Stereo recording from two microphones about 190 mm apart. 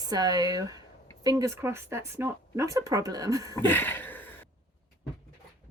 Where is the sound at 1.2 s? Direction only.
15° right (ahead or behind).